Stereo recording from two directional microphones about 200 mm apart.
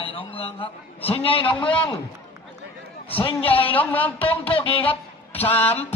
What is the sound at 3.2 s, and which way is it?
Speech, 25° left (ahead or behind).